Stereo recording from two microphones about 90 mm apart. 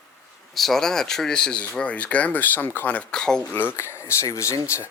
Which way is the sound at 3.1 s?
10° left (ahead or behind).